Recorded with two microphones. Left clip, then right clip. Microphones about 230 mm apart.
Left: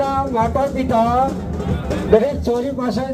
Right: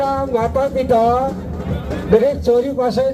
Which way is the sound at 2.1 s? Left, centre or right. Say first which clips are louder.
Right 3 dB; right.